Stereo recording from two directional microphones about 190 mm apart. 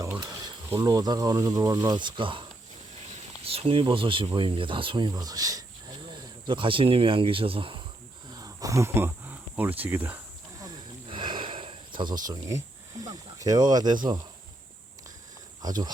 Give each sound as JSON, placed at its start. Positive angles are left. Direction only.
{"t": 0.0, "sound": "speech", "side_deg": -20}
{"t": 8.3, "sound": "cricket", "side_deg": -20}
{"t": 11.1, "sound": "a sound", "side_deg": -25}
{"t": 12.3, "sound": "speech", "side_deg": -15}